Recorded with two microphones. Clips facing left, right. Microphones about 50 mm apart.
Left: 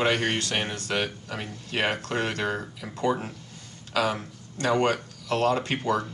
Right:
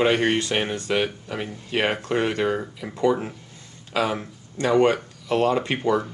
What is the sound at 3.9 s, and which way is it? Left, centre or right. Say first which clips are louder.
Speech: right 2 dB; right.